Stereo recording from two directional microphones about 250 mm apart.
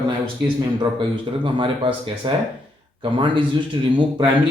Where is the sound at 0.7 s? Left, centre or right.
Centre.